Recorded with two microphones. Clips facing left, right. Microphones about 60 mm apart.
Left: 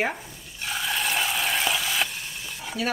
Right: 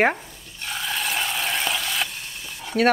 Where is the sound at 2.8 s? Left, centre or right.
Right.